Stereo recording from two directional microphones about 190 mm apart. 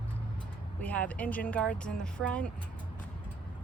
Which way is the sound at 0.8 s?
10° left (ahead or behind).